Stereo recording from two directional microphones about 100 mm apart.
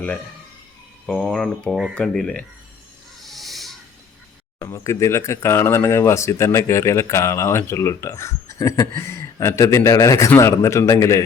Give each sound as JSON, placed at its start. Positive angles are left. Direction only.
{"t": 1.0, "sound": "speech", "side_deg": 5}
{"t": 3.2, "sound": "owl", "side_deg": 0}
{"t": 4.6, "sound": "speech", "side_deg": 30}